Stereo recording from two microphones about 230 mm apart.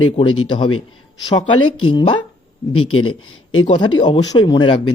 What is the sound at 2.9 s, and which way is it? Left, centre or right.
Speech, left.